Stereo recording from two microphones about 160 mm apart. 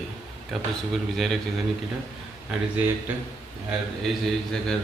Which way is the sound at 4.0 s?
5° left (ahead or behind).